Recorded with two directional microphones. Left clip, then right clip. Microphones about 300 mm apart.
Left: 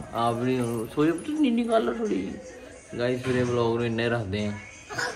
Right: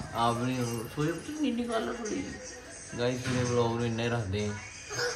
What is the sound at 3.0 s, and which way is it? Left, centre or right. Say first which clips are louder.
Speech: left 5 dB; centre.